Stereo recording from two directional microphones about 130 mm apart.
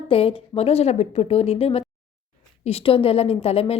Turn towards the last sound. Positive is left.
turn(degrees=50)  # may be behind; listen again after turning